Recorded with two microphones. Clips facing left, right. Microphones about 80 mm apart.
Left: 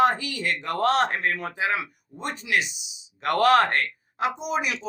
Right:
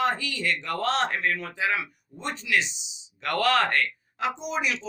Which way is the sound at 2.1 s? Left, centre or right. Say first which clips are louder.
Left 1 dB; left.